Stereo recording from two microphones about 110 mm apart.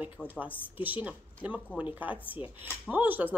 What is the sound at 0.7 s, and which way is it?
Speech, 15° right (ahead or behind).